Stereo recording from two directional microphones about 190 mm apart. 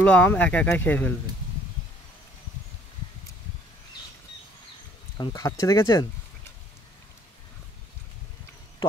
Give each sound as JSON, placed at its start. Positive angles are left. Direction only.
{"t": 0.0, "sound": "speech", "side_deg": 5}
{"t": 5.1, "sound": "speech", "side_deg": 15}